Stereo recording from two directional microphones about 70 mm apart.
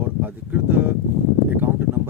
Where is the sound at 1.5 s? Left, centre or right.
Right.